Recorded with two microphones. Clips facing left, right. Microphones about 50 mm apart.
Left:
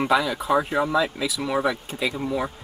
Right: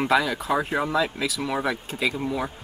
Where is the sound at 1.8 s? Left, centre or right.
Centre.